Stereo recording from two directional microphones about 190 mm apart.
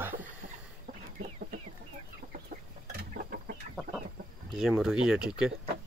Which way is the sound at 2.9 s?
55° right (ahead or behind).